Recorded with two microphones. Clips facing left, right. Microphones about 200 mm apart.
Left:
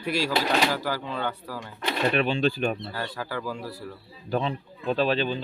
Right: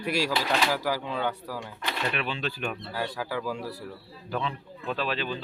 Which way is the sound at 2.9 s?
5° right (ahead or behind).